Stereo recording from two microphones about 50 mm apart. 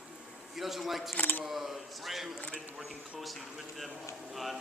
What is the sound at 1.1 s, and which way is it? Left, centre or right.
Horse, left.